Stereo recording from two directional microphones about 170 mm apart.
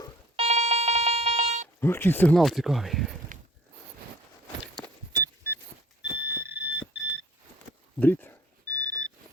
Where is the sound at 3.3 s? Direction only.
50° right (ahead or behind).